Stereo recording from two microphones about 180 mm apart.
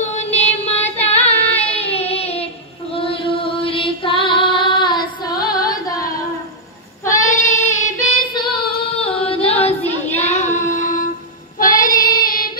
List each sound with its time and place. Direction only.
0.0 s a sound: 40° left (ahead or behind)
2.9 s music: 30° left (ahead or behind)
5.5 s singing: 20° left (ahead or behind)
7.1 s child singing: 15° left (ahead or behind)
8.3 s female singing: 25° left (ahead or behind)
9.2 s singing: 30° left (ahead or behind)
10.2 s child singing: 40° left (ahead or behind)